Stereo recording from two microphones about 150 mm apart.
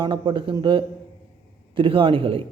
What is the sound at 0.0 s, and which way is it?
A man's voice, 35° right (ahead or behind).